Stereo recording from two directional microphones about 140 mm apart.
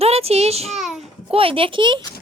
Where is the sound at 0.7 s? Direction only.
Centre (ahead or behind).